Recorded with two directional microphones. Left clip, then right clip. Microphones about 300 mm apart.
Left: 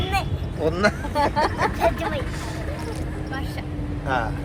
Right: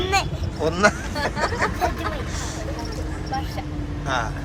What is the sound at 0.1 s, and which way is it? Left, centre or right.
Vehicle, centre.